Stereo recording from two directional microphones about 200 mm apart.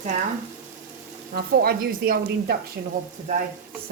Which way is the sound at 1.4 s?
45° right (ahead or behind).